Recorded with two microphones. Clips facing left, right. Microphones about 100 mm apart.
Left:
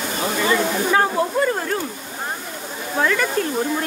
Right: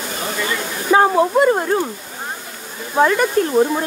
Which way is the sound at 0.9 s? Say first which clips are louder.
Right 9 dB; 20° right (ahead or behind).